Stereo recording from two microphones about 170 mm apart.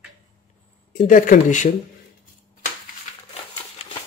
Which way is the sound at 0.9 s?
50° left (ahead or behind).